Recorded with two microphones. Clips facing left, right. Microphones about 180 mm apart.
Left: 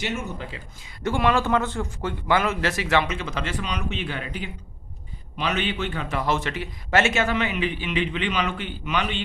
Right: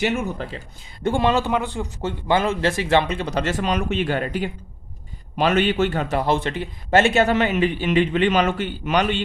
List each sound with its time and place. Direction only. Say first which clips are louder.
0.1 s speech: right 6 dB; 60° right (ahead or behind)
1.0 s a man's voice: right 2 dB; 25° right (ahead or behind); by 9.1 s 45° right (ahead or behind)